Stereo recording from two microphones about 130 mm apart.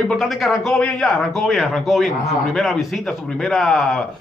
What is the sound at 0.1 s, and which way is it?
Speech, centre (ahead or behind).